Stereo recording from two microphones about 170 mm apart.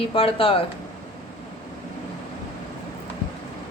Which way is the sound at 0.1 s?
30° left (ahead or behind).